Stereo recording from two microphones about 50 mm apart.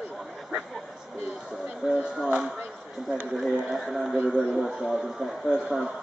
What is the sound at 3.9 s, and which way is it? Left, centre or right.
Speech, centre.